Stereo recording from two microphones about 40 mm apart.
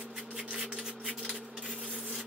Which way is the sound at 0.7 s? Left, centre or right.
Right.